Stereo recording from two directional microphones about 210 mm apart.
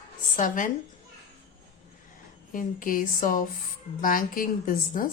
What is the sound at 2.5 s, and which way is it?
Speech, 40° left (ahead or behind).